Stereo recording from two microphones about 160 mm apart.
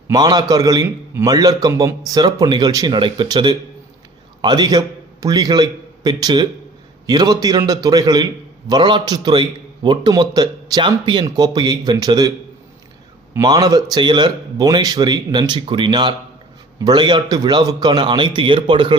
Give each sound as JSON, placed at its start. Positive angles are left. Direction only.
{"t": 0.1, "sound": "a man's voice", "side_deg": -25}
{"t": 13.3, "sound": "a man's voice", "side_deg": -25}